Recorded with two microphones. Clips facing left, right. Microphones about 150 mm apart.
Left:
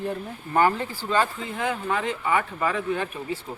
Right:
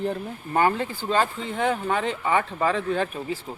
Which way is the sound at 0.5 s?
20° right (ahead or behind).